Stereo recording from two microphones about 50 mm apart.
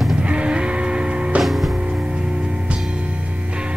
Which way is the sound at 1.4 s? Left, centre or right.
Centre.